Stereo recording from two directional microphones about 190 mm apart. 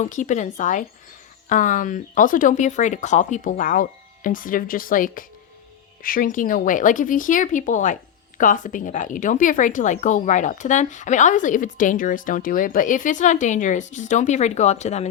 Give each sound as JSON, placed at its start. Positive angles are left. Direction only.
{"t": 0.0, "sound": "a woman's voice", "side_deg": 40}